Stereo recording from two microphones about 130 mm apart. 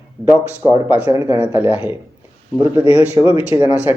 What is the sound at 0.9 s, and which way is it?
A man's voice, 15° right (ahead or behind).